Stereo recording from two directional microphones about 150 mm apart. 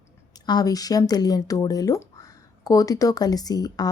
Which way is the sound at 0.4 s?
25° left (ahead or behind).